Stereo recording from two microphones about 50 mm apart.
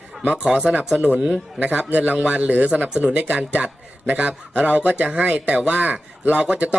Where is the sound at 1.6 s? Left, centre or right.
Right.